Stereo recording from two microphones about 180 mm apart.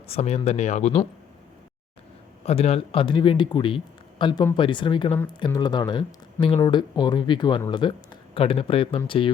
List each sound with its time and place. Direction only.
0.1 s speech: 35° left (ahead or behind)
2.4 s speech: 35° left (ahead or behind)